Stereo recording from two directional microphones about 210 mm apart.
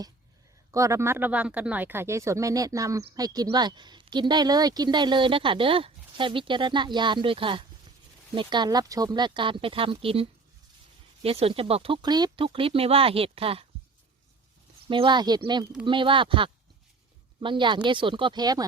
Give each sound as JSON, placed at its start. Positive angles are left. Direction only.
{"t": 0.7, "sound": "a woman's voice", "side_deg": -15}
{"t": 14.8, "sound": "a woman's voice", "side_deg": -25}